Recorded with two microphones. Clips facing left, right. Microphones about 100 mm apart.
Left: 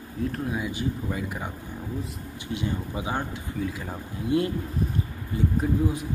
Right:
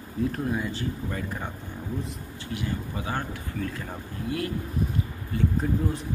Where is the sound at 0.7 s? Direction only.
10° left (ahead or behind).